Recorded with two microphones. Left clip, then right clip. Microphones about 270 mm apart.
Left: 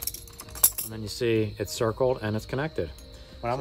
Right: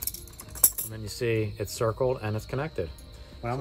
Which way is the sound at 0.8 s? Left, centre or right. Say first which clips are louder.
Left 4 dB; left.